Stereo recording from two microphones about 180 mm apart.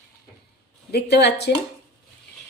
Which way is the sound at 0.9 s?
65° left (ahead or behind).